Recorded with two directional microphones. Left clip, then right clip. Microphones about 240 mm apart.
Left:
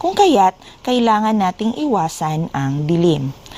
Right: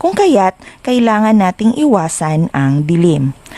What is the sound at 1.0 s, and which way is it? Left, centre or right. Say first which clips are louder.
Speech: right 3 dB; right.